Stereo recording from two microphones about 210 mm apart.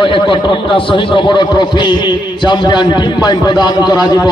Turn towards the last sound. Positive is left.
turn(degrees=20)  # may be behind; listen again after turning